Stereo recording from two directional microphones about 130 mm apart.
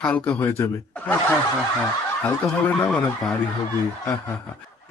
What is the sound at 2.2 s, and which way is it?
Speech, 10° left (ahead or behind).